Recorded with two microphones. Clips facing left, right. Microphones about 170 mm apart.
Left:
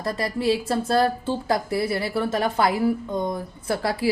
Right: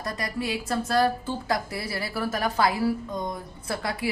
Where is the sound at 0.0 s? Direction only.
30° left (ahead or behind).